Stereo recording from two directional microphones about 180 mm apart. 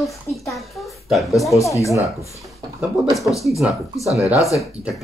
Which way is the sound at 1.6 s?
15° left (ahead or behind).